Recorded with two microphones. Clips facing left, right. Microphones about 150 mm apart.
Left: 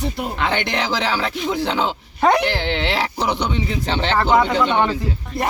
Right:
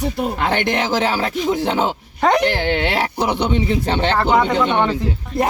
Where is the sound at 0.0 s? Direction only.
45° right (ahead or behind).